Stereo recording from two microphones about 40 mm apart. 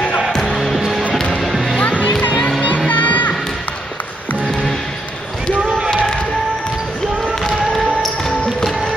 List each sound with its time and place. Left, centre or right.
0.4 s music: centre
0.7 s music: centre
1.8 s music: left
7.4 s music: centre